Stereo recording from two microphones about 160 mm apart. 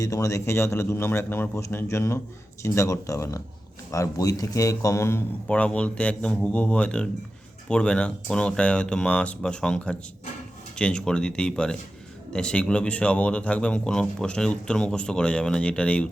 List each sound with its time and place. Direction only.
0.0 s a man's voice: 20° left (ahead or behind)